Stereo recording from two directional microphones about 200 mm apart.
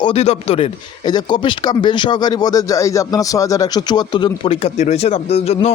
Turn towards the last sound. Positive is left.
turn(degrees=30)  # may be behind; listen again after turning